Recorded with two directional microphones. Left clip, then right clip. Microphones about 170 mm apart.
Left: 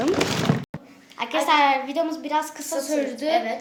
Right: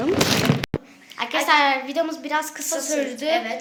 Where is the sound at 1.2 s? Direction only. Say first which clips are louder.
Right 1 dB; centre (ahead or behind).